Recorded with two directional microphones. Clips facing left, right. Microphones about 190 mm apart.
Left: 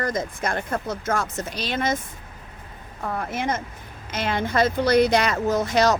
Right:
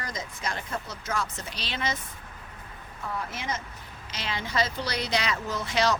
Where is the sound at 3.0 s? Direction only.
55° left (ahead or behind).